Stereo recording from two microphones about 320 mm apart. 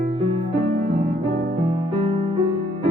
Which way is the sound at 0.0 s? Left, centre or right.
Centre.